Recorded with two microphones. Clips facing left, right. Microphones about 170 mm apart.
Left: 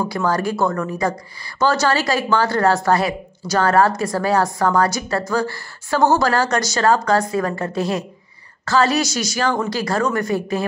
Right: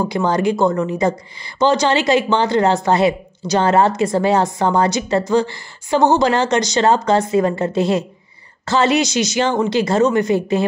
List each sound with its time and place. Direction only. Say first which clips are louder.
0.0 s a woman's voice: right 3 dB; 20° right (ahead or behind)